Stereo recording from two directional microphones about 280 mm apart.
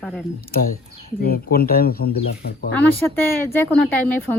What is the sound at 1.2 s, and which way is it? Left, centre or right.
Speech, left.